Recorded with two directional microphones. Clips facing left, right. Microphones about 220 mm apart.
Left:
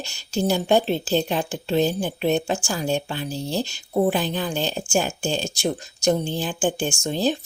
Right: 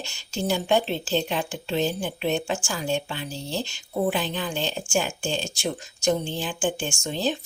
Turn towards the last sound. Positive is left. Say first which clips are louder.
# left 4 dB
turn(degrees=40)  # may be behind; listen again after turning